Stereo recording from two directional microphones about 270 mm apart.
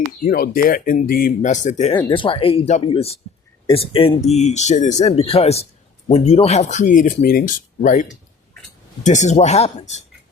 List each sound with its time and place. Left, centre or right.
0.3 s speech: left
9.0 s speech: left